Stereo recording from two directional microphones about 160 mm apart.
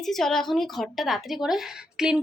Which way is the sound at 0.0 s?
Centre (ahead or behind).